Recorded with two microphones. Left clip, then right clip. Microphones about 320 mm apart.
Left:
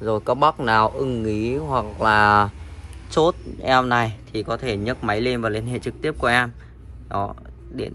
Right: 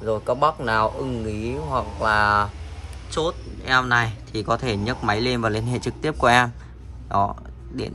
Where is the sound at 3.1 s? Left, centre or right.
Centre.